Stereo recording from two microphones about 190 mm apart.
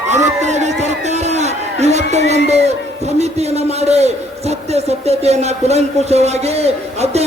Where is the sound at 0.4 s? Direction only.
35° right (ahead or behind).